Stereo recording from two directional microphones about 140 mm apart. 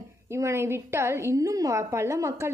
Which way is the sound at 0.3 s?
20° right (ahead or behind).